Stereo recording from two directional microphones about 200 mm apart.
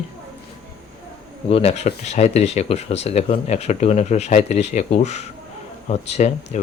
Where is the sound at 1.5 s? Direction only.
30° left (ahead or behind).